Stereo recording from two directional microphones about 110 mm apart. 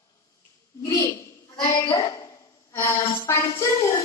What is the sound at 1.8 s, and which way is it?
Speech, 50° left (ahead or behind).